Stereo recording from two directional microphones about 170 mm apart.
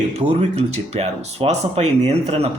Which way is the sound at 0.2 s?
40° right (ahead or behind).